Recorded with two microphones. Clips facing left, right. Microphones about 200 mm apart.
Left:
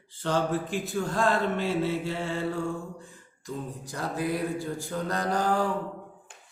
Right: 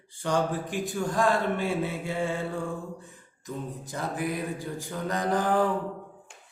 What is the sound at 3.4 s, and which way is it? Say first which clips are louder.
Mantra: even; 20° right (ahead or behind).